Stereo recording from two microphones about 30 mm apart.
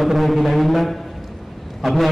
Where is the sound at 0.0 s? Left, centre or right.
Centre.